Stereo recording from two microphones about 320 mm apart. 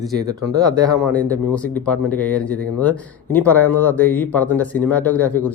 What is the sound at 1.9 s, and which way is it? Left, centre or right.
Speech, centre.